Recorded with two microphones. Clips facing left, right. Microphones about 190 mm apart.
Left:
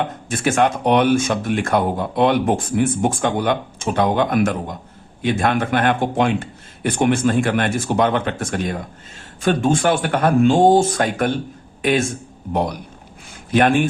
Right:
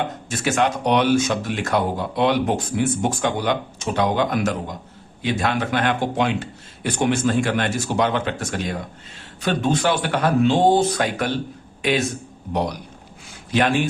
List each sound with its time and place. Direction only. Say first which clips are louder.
0.3 s speech: left 4 dB; 55° left (ahead or behind)
13.5 s speech: left 4 dB; 50° left (ahead or behind)